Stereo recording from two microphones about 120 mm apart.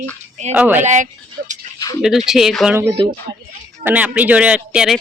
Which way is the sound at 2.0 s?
5° right (ahead or behind).